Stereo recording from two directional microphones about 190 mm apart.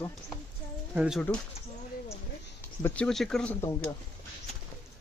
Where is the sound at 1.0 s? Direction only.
5° right (ahead or behind).